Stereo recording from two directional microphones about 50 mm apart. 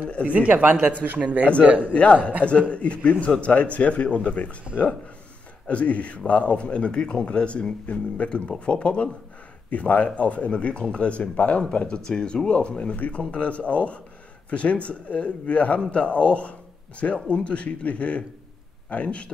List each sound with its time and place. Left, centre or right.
0.3 s speech: right
2.4 s a man's voice: left
5.7 s a man's voice: left